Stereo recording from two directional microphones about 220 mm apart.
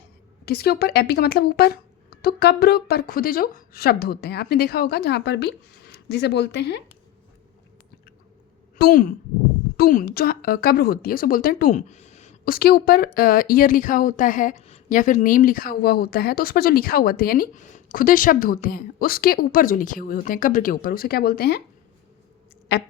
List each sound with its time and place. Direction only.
0.4 s speech: 45° left (ahead or behind)
8.8 s a woman's voice: 40° left (ahead or behind)
22.7 s speech: 45° left (ahead or behind)